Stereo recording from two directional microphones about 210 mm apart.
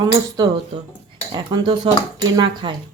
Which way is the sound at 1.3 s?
20° right (ahead or behind).